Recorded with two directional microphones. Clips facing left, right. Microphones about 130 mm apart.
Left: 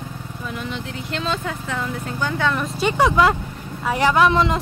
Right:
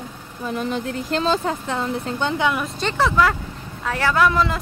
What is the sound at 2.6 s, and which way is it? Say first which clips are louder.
A man's voice: left 3 dB; 10° left (ahead or behind).